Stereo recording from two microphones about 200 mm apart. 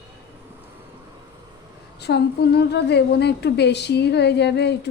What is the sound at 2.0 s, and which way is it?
A woman's voice, 55° left (ahead or behind).